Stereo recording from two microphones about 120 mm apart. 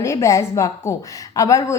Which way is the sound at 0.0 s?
25° left (ahead or behind).